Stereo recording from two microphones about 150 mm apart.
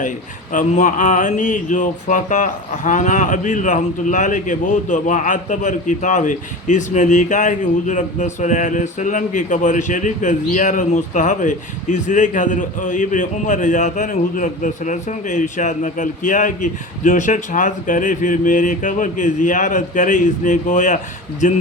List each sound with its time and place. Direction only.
0.5 s mantra: 55° left (ahead or behind)